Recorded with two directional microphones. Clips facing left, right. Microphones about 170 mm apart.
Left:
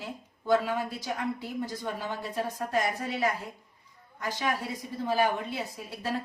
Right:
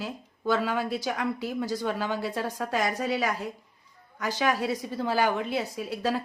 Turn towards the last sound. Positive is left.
turn(degrees=-85)